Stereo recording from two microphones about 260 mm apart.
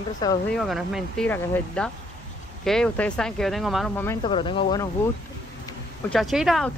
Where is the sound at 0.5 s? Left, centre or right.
Centre.